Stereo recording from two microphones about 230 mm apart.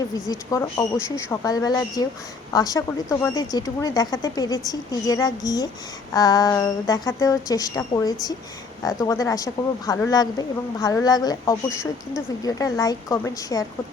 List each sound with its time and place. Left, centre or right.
0.1 s a woman's voice: centre